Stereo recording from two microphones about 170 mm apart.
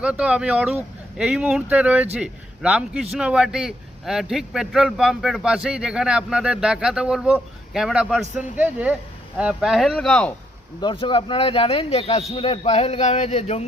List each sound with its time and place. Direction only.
0.0 s a man's voice: 5° right (ahead or behind)
10.8 s speech: 30° left (ahead or behind)